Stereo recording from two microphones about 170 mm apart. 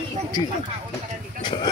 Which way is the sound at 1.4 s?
25° left (ahead or behind).